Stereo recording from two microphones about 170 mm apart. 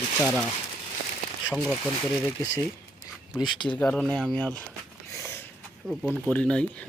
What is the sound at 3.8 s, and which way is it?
Speech, 10° left (ahead or behind).